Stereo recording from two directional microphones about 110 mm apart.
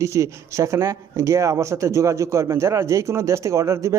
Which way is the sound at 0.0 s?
25° right (ahead or behind).